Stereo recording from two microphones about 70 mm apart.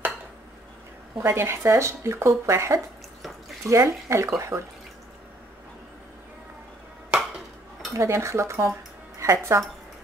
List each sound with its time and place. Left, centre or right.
1.1 s speech: right
7.1 s a sound: centre
7.9 s a woman's voice: right